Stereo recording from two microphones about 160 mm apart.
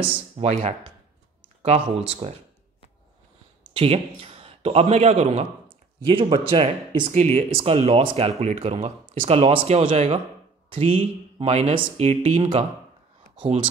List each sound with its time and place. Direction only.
0.4 s speech: 40° right (ahead or behind)
3.7 s a man's voice: 35° right (ahead or behind)